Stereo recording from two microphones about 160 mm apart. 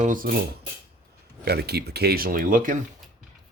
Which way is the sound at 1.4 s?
85° right.